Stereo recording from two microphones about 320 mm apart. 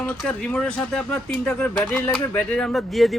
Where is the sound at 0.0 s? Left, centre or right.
Centre.